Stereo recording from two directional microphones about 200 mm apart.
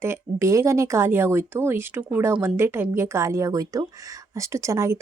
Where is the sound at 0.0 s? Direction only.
15° right (ahead or behind).